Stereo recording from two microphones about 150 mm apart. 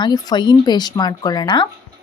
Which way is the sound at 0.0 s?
25° left (ahead or behind).